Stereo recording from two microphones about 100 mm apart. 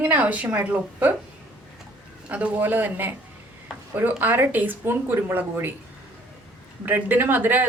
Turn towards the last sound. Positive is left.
turn(degrees=-20)  # may be behind; listen again after turning